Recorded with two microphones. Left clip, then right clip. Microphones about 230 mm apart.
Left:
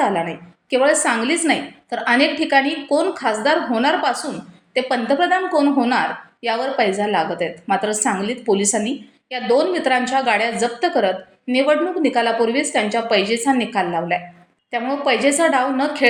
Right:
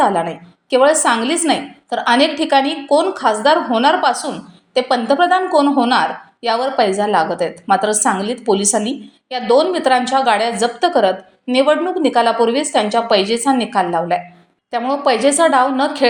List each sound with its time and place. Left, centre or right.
0.7 s a woman's voice: centre